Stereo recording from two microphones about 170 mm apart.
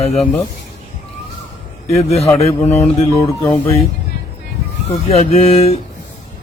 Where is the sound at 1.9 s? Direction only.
40° left (ahead or behind).